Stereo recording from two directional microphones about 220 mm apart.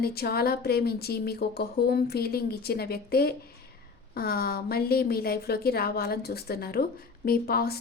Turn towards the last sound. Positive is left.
turn(degrees=45)  # may be behind; listen again after turning